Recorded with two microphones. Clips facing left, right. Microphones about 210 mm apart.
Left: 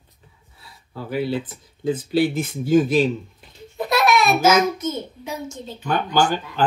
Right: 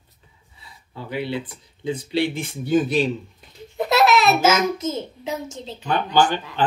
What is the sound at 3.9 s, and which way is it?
A child's voice, 25° right (ahead or behind).